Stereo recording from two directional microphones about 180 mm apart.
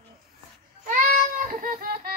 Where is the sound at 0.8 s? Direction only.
45° right (ahead or behind).